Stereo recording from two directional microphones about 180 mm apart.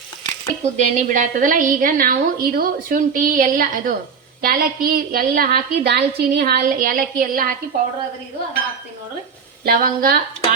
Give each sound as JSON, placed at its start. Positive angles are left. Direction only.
{"t": 0.4, "sound": "a woman's voice", "side_deg": -45}
{"t": 9.6, "sound": "a woman's voice", "side_deg": -55}